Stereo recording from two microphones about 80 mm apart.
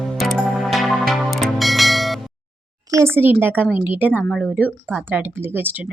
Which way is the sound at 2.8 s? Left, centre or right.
Right.